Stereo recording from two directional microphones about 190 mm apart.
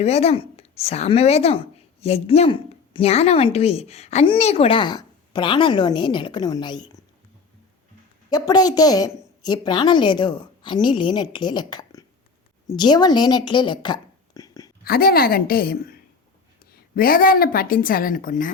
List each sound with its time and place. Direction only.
0.0 s speech: 35° left (ahead or behind)
8.3 s a woman's voice: 20° left (ahead or behind)
14.8 s a woman's voice: 50° left (ahead or behind)